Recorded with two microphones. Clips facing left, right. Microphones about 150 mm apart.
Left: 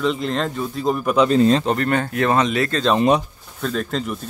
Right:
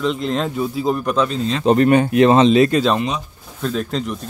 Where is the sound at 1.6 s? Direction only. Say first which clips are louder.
Right 7 dB; 20° right (ahead or behind).